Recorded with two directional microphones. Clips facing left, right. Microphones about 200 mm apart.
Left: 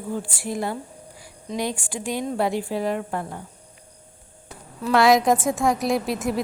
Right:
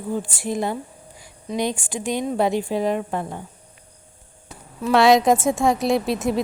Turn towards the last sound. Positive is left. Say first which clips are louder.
# right 3 dB
turn(degrees=-25)  # may be behind; listen again after turning